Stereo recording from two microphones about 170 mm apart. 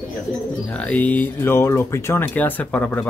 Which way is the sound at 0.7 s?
10° left (ahead or behind).